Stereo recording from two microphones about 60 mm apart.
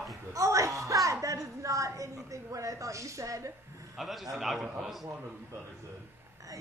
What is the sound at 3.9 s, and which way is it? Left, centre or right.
A man's voice, centre.